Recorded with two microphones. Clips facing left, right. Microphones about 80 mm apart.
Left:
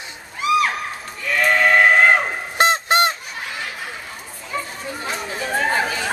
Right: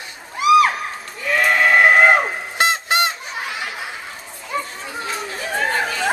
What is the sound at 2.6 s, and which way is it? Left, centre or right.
Goose, left.